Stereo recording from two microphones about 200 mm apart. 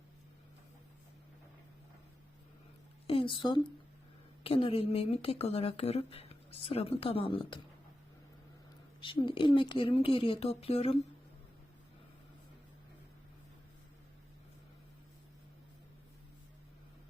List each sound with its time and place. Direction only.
3.1 s a woman's voice: 25° left (ahead or behind)
9.0 s a woman's voice: 25° left (ahead or behind)